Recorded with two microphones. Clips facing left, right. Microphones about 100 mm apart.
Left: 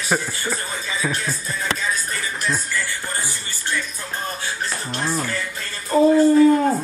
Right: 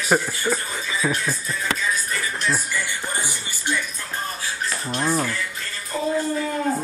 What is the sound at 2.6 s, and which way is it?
Music, 15° right (ahead or behind).